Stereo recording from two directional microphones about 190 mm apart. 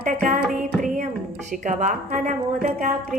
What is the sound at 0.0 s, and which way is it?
Music, 45° right (ahead or behind).